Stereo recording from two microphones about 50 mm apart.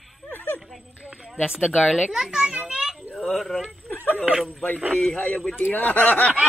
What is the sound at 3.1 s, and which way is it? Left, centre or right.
Speech, centre.